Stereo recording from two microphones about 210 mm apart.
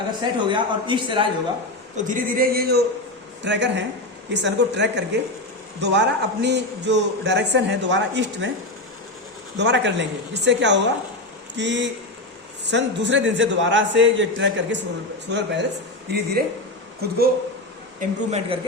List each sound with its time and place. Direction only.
0.3 s a man's voice: 20° right (ahead or behind)
2.0 s a man's voice: 40° right (ahead or behind); by 8.4 s 55° right (ahead or behind)
9.6 s a man's voice: 55° right (ahead or behind)
18.0 s a man's voice: 30° right (ahead or behind)